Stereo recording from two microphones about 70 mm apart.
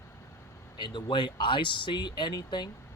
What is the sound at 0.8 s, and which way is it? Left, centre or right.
Speech, left.